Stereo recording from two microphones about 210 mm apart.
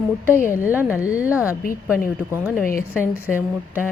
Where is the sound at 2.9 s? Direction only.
10° left (ahead or behind).